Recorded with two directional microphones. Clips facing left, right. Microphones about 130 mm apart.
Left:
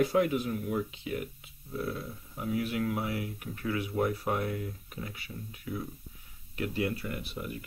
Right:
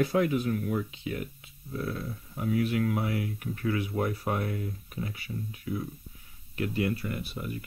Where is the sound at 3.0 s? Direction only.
25° left (ahead or behind).